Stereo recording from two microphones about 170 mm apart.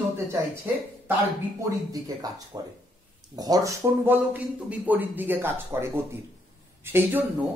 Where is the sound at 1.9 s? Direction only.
20° right (ahead or behind).